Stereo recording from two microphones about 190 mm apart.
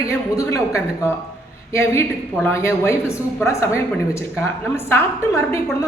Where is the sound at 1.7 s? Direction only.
15° left (ahead or behind).